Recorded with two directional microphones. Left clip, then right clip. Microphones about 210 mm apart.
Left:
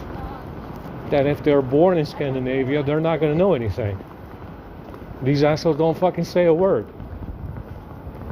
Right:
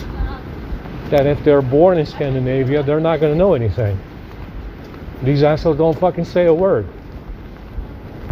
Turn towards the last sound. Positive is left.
turn(degrees=60)  # may be behind; listen again after turning